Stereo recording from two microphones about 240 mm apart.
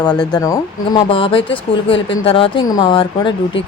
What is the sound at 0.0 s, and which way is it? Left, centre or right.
Speech, centre.